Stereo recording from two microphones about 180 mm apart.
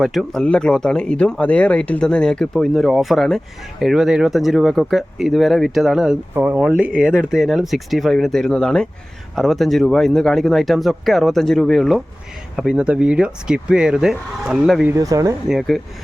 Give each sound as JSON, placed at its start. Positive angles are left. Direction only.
{"t": 0.0, "sound": "speech", "side_deg": 0}
{"t": 14.9, "sound": "speech", "side_deg": -20}
{"t": 15.4, "sound": "speech", "side_deg": 0}